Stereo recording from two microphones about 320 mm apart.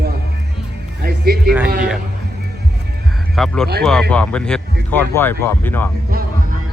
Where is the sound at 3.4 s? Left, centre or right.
Centre.